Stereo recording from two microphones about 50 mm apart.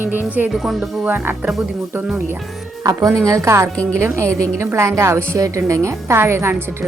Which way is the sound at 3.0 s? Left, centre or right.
Right.